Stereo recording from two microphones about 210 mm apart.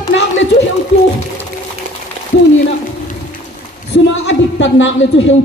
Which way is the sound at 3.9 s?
60° left (ahead or behind).